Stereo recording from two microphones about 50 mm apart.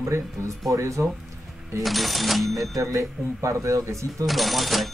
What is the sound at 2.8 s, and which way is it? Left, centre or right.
Speech, right.